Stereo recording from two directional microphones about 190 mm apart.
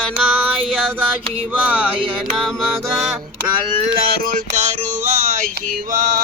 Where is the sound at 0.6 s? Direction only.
5° left (ahead or behind).